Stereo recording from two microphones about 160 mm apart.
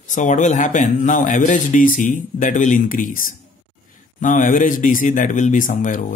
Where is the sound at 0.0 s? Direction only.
50° left (ahead or behind).